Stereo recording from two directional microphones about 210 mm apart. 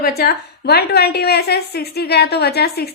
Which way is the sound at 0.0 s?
45° left (ahead or behind).